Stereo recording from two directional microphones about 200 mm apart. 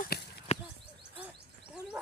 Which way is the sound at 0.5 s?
30° left (ahead or behind).